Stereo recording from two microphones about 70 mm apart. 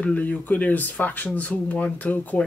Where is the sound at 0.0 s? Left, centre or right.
Left.